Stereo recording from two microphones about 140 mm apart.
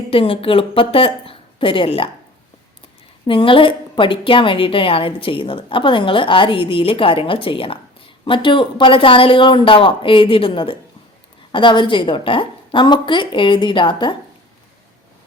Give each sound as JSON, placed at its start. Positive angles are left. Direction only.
{"t": 0.1, "sound": "a woman's voice", "side_deg": 40}
{"t": 3.2, "sound": "a woman's voice", "side_deg": 40}